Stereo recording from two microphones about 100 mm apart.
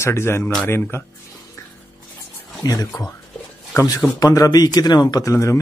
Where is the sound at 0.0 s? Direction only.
25° left (ahead or behind).